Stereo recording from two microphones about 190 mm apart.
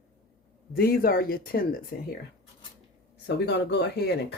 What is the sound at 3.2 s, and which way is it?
Speech, 60° left (ahead or behind).